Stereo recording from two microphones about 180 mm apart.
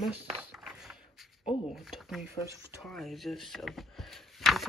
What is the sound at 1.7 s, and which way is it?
Speech, centre (ahead or behind).